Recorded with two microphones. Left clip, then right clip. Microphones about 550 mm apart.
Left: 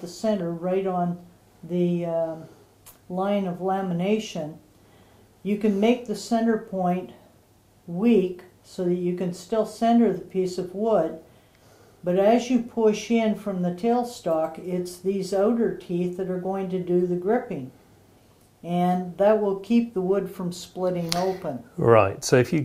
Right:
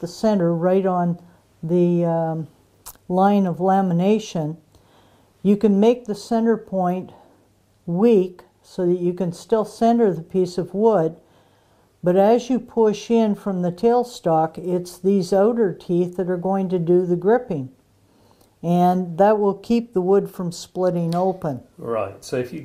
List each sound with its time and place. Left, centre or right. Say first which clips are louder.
0.0 s speech: right 6 dB; right
5.4 s speech: right 6 dB; right
8.7 s speech: right 5 dB; right
18.6 s speech: right 6 dB; right
21.7 s speech: left 11 dB; left